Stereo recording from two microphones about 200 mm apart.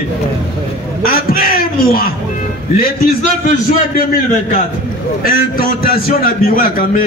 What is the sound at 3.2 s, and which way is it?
Speech, 35° left (ahead or behind).